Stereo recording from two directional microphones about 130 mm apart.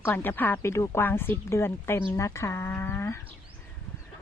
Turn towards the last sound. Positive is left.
turn(degrees=20)  # may be behind; listen again after turning